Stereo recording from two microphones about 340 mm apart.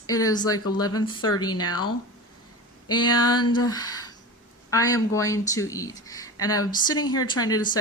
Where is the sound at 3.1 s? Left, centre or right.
Centre.